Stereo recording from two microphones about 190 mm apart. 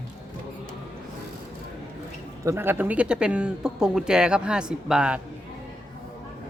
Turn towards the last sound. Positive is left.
turn(degrees=-5)  # may be behind; listen again after turning